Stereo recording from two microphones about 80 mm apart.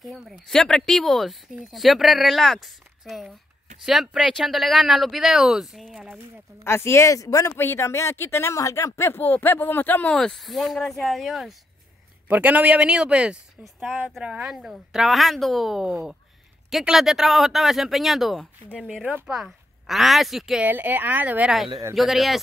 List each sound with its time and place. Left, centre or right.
0.3 s speech: centre
6.6 s speech: left
7.5 s speech: left
10.1 s speech: centre
12.3 s speech: centre
20.6 s speech: right
21.9 s speech: centre